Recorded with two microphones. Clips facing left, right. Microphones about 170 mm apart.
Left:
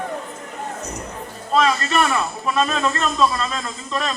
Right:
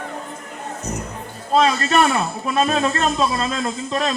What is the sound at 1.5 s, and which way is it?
A man's voice, 35° right (ahead or behind).